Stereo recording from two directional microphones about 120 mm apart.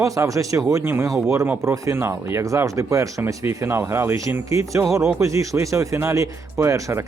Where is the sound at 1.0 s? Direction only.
5° right (ahead or behind).